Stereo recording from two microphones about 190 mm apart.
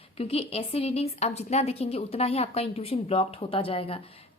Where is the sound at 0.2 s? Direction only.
30° left (ahead or behind).